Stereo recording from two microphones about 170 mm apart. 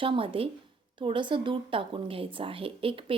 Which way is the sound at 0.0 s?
30° right (ahead or behind).